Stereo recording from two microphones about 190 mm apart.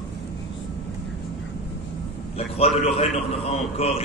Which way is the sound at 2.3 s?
30° left (ahead or behind).